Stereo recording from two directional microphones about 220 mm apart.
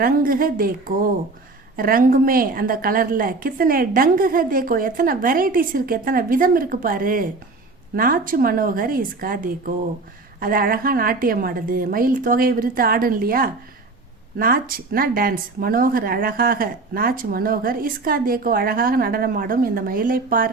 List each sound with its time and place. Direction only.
0.0 s a woman's voice: 40° right (ahead or behind)